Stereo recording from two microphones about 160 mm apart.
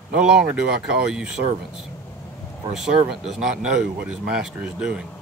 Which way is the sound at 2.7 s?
Centre (ahead or behind).